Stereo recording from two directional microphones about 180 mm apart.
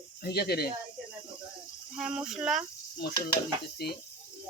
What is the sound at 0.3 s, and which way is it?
Speech, 60° left (ahead or behind).